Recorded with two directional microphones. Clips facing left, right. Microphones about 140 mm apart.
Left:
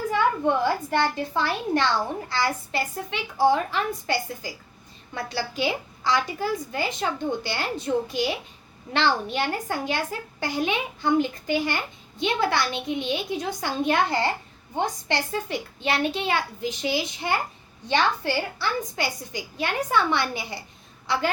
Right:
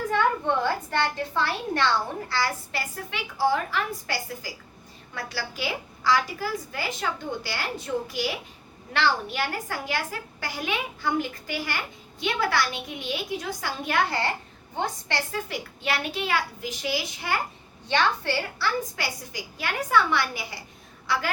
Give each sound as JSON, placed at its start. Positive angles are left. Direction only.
{"t": 0.1, "sound": "a woman's voice", "side_deg": 10}